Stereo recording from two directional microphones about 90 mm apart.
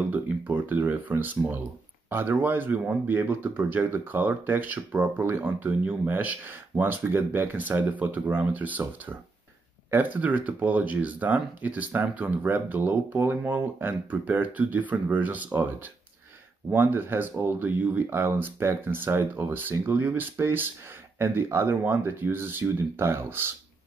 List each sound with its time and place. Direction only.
0.1 s a sound: 20° right (ahead or behind)
2.0 s speech: 20° right (ahead or behind)
16.7 s speech: 25° right (ahead or behind)